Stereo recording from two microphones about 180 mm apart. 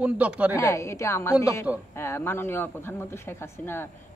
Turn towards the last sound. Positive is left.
turn(degrees=10)  # may be behind; listen again after turning